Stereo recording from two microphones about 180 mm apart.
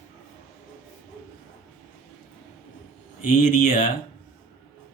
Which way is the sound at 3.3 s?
45° left (ahead or behind).